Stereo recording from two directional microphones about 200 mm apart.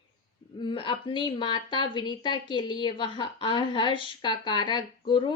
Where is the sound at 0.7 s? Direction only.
25° left (ahead or behind).